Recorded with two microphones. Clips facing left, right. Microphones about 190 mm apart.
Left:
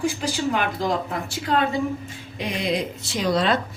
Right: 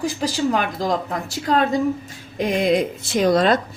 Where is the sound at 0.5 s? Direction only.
40° right (ahead or behind).